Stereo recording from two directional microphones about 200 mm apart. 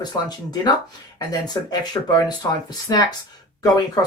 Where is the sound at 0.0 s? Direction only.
20° left (ahead or behind).